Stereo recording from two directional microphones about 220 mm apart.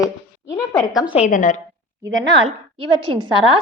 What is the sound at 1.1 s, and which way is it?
Speech, 30° left (ahead or behind).